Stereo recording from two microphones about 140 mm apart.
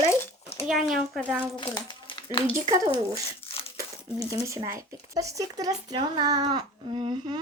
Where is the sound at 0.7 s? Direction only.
Centre (ahead or behind).